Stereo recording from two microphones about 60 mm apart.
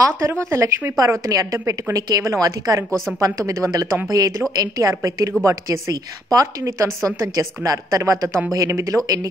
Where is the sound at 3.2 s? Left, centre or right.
Right.